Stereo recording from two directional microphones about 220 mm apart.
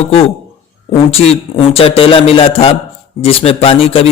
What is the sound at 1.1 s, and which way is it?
Speech, 25° left (ahead or behind).